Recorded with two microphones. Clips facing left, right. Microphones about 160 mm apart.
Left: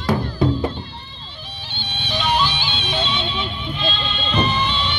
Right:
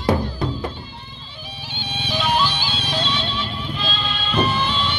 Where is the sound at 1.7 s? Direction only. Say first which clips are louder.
Right 1 dB; 5° right (ahead or behind).